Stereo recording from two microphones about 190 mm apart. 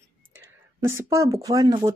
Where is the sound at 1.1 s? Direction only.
15° right (ahead or behind).